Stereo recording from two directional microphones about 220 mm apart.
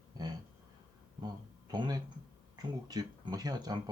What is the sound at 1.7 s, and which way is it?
Speech, 20° right (ahead or behind).